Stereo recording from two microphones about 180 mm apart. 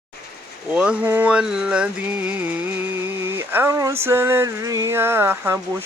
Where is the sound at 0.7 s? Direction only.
5° right (ahead or behind).